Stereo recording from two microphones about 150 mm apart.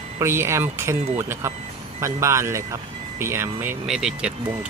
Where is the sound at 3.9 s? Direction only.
5° right (ahead or behind).